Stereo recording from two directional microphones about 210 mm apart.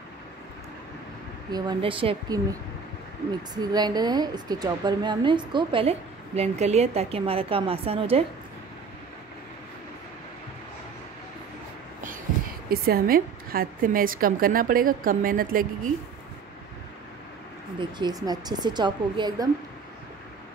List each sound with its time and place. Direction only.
1.5 s a woman's voice: 20° right (ahead or behind)
3.5 s a woman's voice: 20° right (ahead or behind)
12.6 s a woman's voice: 45° right (ahead or behind)
17.7 s a woman's voice: 20° right (ahead or behind)